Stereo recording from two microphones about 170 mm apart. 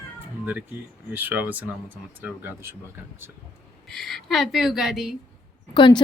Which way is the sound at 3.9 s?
Centre (ahead or behind).